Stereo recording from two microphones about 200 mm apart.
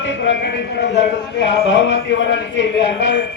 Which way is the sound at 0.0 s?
65° left (ahead or behind).